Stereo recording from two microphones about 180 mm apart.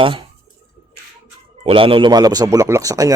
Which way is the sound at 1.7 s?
30° right (ahead or behind).